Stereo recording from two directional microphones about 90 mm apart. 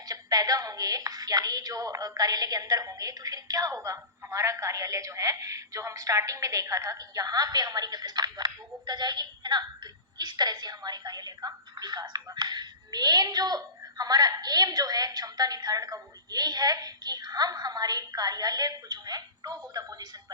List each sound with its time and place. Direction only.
0.1 s a woman's voice: 45° right (ahead or behind)